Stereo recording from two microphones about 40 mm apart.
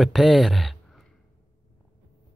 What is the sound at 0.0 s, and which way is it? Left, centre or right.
Speech, centre.